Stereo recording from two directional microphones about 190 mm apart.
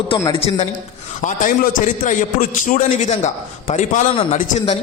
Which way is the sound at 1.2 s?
45° left (ahead or behind).